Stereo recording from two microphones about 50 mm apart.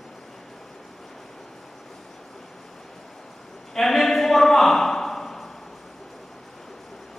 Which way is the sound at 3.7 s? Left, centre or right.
Centre.